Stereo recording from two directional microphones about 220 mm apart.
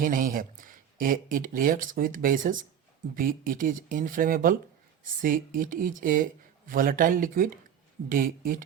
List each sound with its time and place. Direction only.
0.0 s speech: 40° right (ahead or behind)